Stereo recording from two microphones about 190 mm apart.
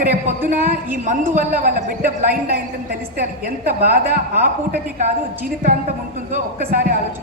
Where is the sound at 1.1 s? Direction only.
45° right (ahead or behind).